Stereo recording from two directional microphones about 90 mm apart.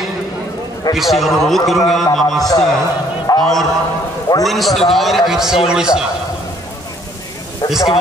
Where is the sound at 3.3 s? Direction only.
45° left (ahead or behind).